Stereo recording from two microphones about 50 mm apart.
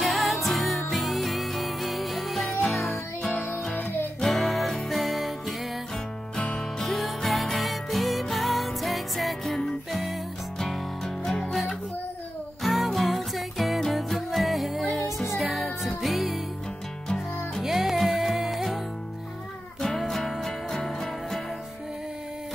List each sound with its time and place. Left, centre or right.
0.0 s music: centre
3.2 s music: centre
4.2 s music: centre
6.3 s music: centre
6.8 s music: centre
12.6 s music: centre
17.6 s music: centre
20.0 s music: centre